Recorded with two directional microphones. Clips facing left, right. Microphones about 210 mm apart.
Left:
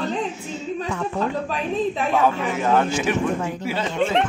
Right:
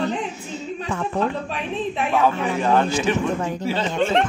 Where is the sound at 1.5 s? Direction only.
40° left (ahead or behind).